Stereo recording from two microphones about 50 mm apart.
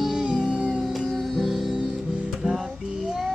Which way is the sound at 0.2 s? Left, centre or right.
Centre.